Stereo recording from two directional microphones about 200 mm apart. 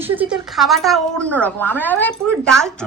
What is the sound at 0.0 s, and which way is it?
A woman's voice, 10° right (ahead or behind).